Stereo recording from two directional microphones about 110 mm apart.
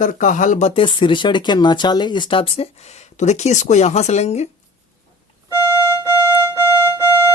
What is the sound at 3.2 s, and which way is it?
Speech, 90° left.